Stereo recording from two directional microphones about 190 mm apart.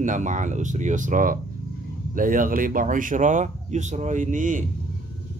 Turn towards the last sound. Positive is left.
turn(degrees=-45)  # may be behind; listen again after turning